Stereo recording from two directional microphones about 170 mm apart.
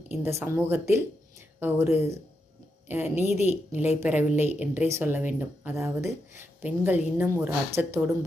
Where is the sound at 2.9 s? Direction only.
10° right (ahead or behind).